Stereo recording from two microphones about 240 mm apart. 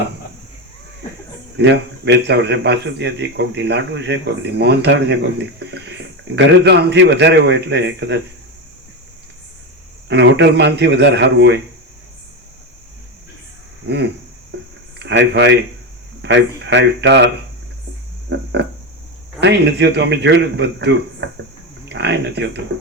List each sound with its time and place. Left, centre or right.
1.5 s a man's voice: right
10.1 s a man's voice: right
13.8 s a man's voice: right
14.5 s a sound: right
14.9 s a man's voice: right
18.3 s frog: right
19.4 s a man's voice: right